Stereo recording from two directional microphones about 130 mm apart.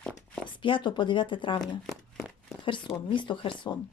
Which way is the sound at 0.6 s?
40° left (ahead or behind).